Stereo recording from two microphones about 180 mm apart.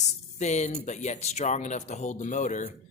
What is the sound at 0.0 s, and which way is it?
Speech, 40° left (ahead or behind).